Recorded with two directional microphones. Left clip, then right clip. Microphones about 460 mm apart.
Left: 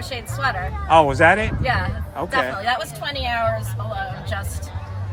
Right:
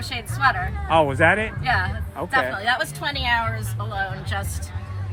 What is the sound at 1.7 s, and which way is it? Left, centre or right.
Speech, centre.